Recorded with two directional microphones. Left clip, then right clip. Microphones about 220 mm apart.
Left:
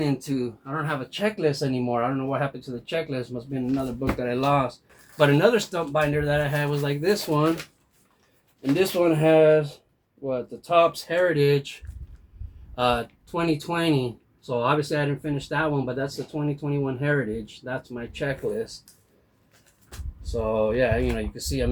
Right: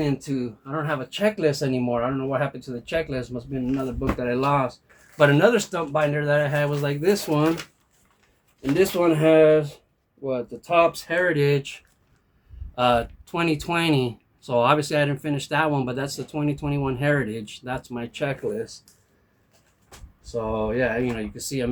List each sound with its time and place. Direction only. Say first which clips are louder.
0.2 s speech: even; 10° right (ahead or behind)
8.6 s speech: right 1 dB; 25° right (ahead or behind)
20.2 s speech: left 2 dB; 20° right (ahead or behind)